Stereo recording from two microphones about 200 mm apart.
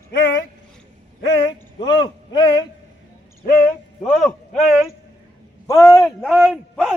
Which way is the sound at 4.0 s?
Centre (ahead or behind).